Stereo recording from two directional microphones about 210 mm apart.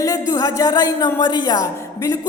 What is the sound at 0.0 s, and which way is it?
Music, 15° left (ahead or behind).